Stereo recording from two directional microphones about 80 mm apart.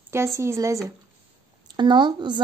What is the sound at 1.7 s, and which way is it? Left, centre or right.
Speech, right.